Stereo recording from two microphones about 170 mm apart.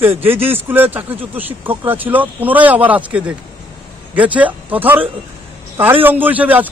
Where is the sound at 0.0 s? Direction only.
10° right (ahead or behind).